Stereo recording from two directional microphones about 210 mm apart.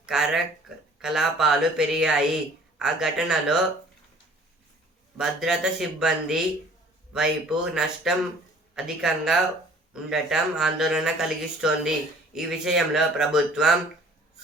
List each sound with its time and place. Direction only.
0.0 s speech: 5° right (ahead or behind)
5.1 s speech: centre (ahead or behind)